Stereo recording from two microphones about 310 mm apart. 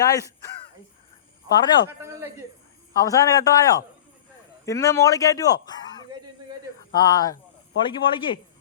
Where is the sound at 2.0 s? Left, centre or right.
Centre.